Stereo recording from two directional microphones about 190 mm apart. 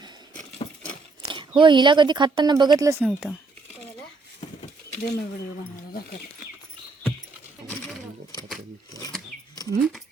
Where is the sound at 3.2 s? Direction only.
10° left (ahead or behind).